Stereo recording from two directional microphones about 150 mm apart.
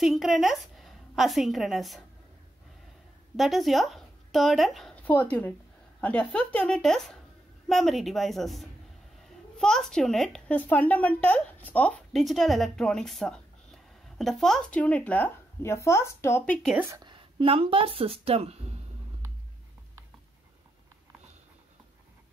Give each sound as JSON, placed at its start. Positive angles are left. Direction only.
{"t": 0.0, "sound": "a woman's voice", "side_deg": 0}
{"t": 3.3, "sound": "a woman's voice", "side_deg": 0}
{"t": 16.9, "sound": "speech", "side_deg": -30}